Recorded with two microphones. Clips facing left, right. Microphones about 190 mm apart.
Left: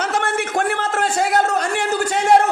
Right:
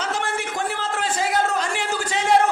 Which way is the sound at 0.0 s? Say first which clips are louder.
Left 5 dB; 60° left (ahead or behind).